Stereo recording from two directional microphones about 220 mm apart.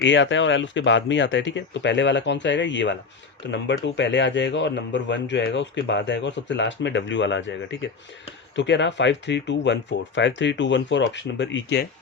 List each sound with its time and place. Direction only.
0.0 s speech: 55° left (ahead or behind)